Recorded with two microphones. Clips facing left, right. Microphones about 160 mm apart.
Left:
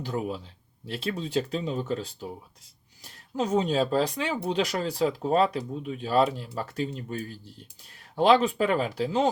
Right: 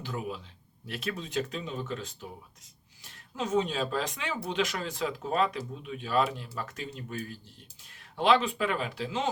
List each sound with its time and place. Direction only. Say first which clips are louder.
0.0 s speech: left 5 dB; 35° left (ahead or behind)